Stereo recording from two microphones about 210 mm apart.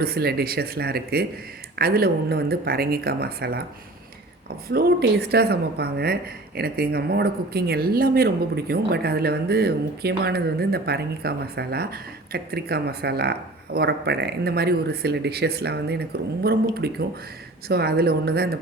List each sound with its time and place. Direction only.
0.0 s speech: 45° right (ahead or behind)
4.7 s speech: 50° right (ahead or behind)